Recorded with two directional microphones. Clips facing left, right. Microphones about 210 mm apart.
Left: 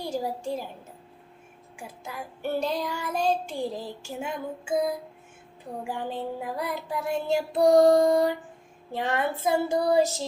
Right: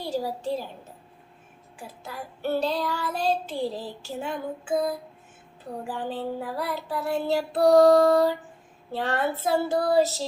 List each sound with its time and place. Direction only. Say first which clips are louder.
0.0 s a woman's voice: right 1 dB; 15° left (ahead or behind)
1.7 s child singing: even; 15° left (ahead or behind)